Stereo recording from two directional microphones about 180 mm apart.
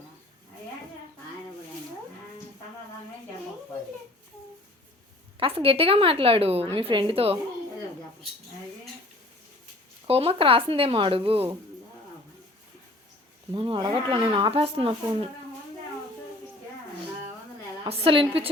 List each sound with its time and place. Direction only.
5.4 s a woman's voice: 30° right (ahead or behind)
10.1 s a woman's voice: 30° right (ahead or behind)
13.5 s speech: 30° right (ahead or behind)
17.8 s a woman's voice: 30° right (ahead or behind)